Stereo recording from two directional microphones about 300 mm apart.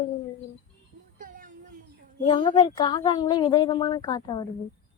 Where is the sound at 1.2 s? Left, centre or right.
Right.